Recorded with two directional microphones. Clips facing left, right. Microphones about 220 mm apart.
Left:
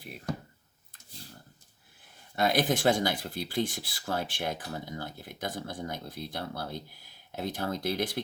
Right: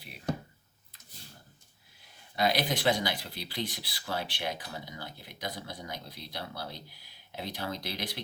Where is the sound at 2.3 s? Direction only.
50° left (ahead or behind).